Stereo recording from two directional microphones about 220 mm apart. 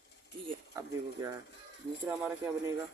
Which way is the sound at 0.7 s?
15° right (ahead or behind).